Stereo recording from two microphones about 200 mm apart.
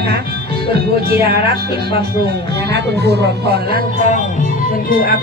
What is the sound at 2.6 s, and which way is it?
Speech, 55° right (ahead or behind).